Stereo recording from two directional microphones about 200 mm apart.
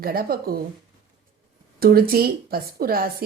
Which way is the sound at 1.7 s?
50° right (ahead or behind).